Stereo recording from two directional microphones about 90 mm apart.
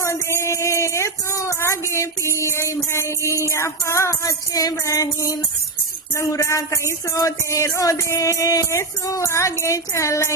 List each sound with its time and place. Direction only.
0.0 s music: 30° left (ahead or behind)